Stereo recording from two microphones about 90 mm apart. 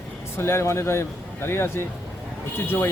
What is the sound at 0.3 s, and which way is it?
A man's voice, 30° left (ahead or behind).